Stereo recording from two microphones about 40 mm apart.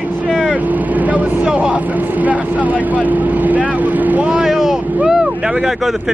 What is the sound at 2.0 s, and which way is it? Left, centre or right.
Speech, right.